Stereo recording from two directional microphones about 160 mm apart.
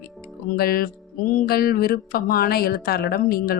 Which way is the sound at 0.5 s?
70° left (ahead or behind).